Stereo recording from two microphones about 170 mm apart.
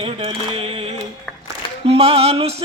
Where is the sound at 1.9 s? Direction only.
35° right (ahead or behind).